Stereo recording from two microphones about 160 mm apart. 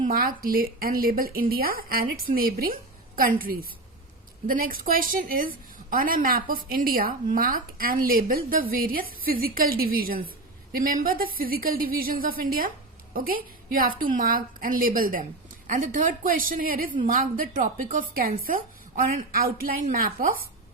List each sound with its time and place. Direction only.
0.0 s a woman's voice: 65° right (ahead or behind)